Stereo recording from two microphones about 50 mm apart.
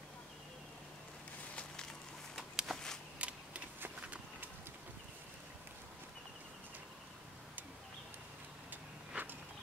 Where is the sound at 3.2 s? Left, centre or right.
Right.